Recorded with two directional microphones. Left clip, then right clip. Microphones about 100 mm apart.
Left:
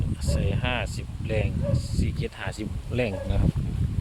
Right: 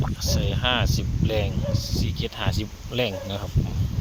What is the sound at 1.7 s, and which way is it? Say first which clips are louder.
Speech: right 5 dB; 25° right (ahead or behind).